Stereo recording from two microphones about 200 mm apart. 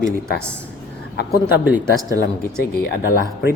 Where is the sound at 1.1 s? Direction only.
50° left (ahead or behind).